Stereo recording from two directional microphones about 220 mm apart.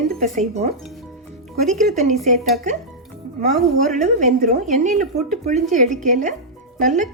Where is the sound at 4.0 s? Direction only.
35° right (ahead or behind).